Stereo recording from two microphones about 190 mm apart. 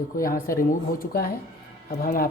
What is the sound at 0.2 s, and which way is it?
Speech, 50° left (ahead or behind).